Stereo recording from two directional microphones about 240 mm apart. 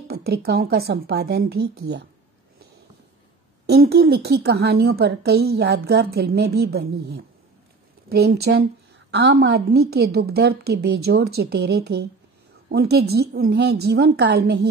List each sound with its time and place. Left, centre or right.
0.1 s a woman's voice: right
3.6 s a woman's voice: right